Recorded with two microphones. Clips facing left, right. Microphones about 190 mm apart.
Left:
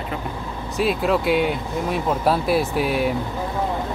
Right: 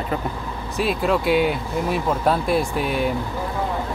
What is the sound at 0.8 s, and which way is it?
Speech, centre (ahead or behind).